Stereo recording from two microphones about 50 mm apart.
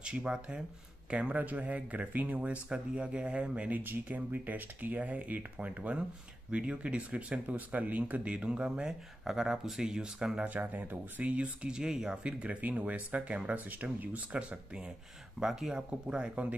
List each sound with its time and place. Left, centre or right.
0.0 s speech: centre
1.1 s speech: right
3.8 s speech: right
8.3 s speech: centre
10.4 s speech: right; by 12.2 s centre
12.2 s speech: right
15.3 s speech: centre
16.1 s speech: right